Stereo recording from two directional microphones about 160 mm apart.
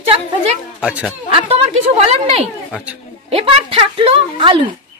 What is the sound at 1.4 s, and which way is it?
A woman's voice, 35° right (ahead or behind).